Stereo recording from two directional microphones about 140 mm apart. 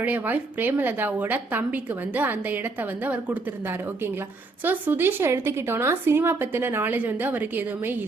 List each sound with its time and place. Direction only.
0.0 s a woman's voice: 10° right (ahead or behind)